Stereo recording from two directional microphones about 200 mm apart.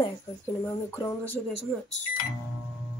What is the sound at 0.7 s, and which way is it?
Speech, 15° left (ahead or behind).